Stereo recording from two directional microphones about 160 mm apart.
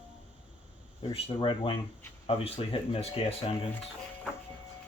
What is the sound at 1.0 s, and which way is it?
Speech, 35° left (ahead or behind).